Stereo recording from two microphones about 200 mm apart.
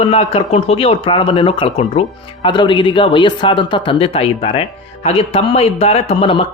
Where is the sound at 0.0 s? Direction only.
30° left (ahead or behind).